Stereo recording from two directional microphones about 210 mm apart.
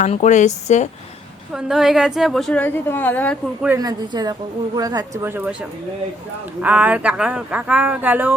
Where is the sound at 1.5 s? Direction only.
Centre (ahead or behind).